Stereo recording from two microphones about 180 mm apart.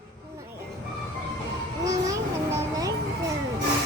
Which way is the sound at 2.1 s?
20° right (ahead or behind).